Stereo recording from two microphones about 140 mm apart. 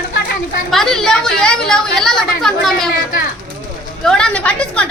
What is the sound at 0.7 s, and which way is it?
A woman's voice, 5° left (ahead or behind).